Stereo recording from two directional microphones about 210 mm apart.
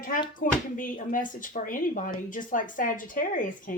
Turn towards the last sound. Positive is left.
turn(degrees=40)  # may be behind; listen again after turning